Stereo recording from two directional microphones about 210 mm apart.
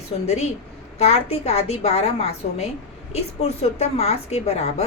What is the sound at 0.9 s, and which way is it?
A woman's voice, 30° left (ahead or behind).